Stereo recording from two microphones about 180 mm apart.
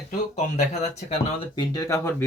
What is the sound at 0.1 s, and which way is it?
Speech, 40° left (ahead or behind).